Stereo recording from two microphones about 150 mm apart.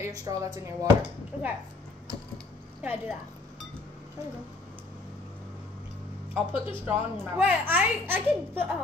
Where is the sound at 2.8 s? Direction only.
5° right (ahead or behind).